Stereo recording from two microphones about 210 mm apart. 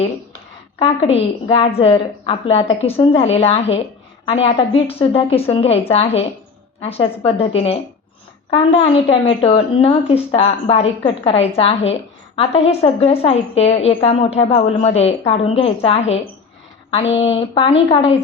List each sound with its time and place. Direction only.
0.8 s a woman's voice: 30° left (ahead or behind)